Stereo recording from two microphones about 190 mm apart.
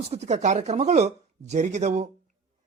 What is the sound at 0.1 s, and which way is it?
Speech, 35° right (ahead or behind).